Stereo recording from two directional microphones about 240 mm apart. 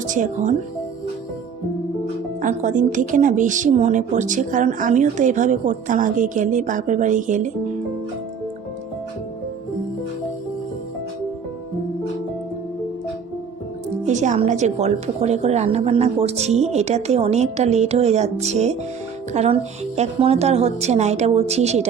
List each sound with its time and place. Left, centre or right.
0.1 s a woman's voice: right
2.4 s a woman's voice: right
14.0 s a woman's voice: right